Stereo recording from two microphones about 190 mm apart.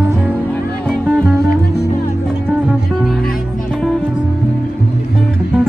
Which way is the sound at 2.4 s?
5° right (ahead or behind).